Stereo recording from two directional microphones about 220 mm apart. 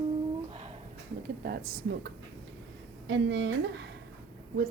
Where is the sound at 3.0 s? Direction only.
55° right (ahead or behind).